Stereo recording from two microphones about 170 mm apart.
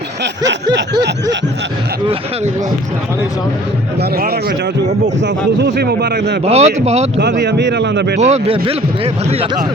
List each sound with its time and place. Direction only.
5.2 s speech: 90° right
6.4 s speech: 40° right (ahead or behind)
7.2 s speech: 85° right
8.2 s speech: 35° right (ahead or behind)